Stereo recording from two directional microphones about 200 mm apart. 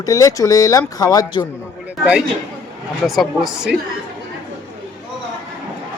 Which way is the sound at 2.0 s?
5° right (ahead or behind).